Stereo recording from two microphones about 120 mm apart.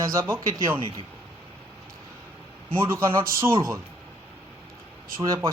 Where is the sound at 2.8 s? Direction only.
20° right (ahead or behind).